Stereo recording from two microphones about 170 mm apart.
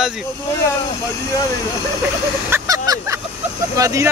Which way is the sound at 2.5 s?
20° right (ahead or behind).